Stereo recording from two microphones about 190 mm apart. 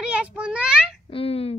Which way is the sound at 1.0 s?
30° left (ahead or behind).